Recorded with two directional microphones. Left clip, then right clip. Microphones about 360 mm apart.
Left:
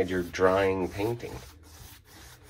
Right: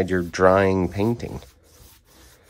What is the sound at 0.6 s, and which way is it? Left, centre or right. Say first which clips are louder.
Speech: right 6 dB; right.